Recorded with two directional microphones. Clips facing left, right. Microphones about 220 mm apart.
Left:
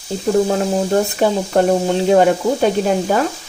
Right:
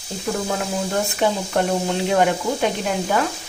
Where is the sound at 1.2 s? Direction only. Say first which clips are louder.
Left 3 dB; 40° left (ahead or behind).